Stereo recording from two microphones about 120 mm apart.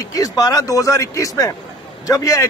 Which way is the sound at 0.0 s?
30° left (ahead or behind).